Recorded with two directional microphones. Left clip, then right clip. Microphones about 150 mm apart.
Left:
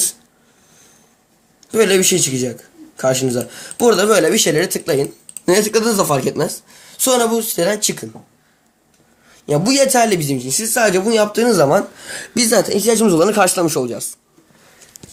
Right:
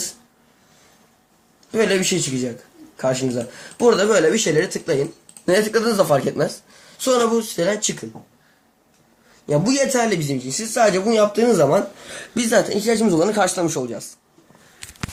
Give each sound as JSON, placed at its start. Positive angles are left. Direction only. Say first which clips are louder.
{"t": 1.7, "sound": "speech", "louder": "left 5 dB", "side_deg": 45}
{"t": 9.5, "sound": "speech", "louder": "left 4 dB", "side_deg": 50}
{"t": 12.6, "sound": "speech", "louder": "left 5 dB", "side_deg": 0}
{"t": 12.9, "sound": "speech", "louder": "left 5 dB", "side_deg": 50}